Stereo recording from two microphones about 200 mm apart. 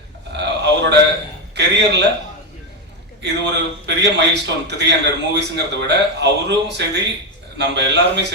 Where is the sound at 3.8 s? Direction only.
60° right (ahead or behind).